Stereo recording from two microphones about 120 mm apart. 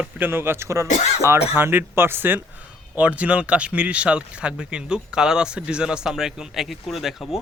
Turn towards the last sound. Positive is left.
turn(degrees=0)  # may be behind; listen again after turning